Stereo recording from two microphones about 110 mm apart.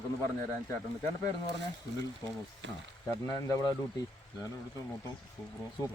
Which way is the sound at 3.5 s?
35° left (ahead or behind).